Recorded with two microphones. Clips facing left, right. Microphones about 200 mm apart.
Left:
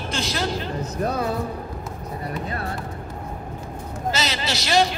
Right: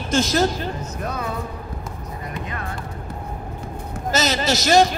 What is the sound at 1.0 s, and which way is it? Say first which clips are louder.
Speech: left 4 dB; 35° left (ahead or behind).